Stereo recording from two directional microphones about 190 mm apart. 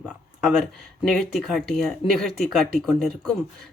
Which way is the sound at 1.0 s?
Centre (ahead or behind).